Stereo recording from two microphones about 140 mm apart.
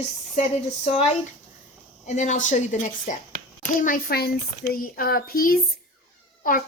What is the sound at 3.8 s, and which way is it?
Speech, 75° left (ahead or behind).